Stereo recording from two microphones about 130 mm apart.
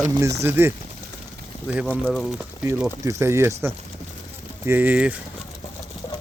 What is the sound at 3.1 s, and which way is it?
Speech, 20° right (ahead or behind).